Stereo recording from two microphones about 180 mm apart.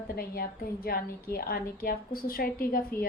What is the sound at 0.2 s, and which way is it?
A woman's voice, 55° left (ahead or behind).